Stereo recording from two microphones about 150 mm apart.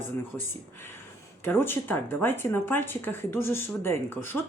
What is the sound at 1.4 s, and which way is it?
Speech, 15° left (ahead or behind).